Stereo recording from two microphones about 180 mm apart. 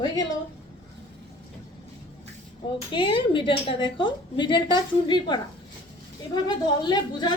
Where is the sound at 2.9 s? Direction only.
25° left (ahead or behind).